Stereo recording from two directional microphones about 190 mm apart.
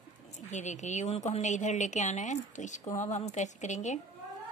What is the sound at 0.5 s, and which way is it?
A woman's voice, 40° left (ahead or behind).